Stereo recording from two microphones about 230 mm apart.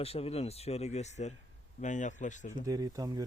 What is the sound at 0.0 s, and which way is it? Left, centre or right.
Speech, left.